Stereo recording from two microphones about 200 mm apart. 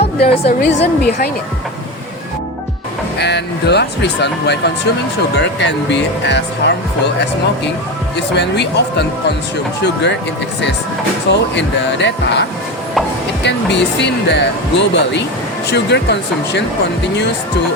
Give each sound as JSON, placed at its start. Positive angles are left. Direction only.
{"t": 0.2, "sound": "a woman's voice", "side_deg": 55}
{"t": 3.2, "sound": "speech", "side_deg": 60}
{"t": 8.1, "sound": "speech", "side_deg": 60}
{"t": 11.3, "sound": "speech", "side_deg": 60}